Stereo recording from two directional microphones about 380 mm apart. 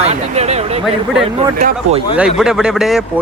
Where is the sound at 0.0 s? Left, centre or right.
Centre.